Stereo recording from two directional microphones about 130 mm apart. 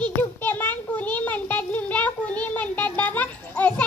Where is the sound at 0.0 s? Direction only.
15° left (ahead or behind).